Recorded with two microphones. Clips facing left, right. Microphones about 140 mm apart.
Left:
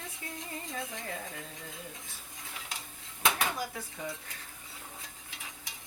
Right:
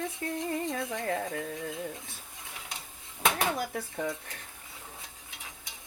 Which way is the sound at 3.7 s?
55° right (ahead or behind).